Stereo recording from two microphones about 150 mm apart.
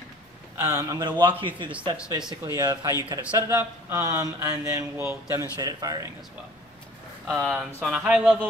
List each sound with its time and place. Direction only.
0.6 s speech: 20° right (ahead or behind)
7.3 s speech: centre (ahead or behind)